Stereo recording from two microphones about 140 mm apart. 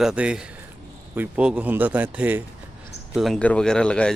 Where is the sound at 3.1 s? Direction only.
Centre (ahead or behind).